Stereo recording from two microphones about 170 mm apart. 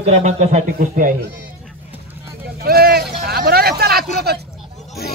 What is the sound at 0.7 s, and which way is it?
Speech, 50° right (ahead or behind).